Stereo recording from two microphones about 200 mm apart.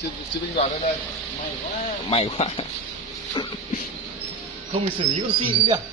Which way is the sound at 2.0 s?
30° left (ahead or behind).